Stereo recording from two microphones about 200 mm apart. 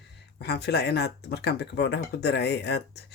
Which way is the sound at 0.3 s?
55° left (ahead or behind).